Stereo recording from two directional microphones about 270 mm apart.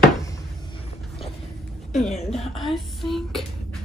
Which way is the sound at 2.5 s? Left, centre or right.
Centre.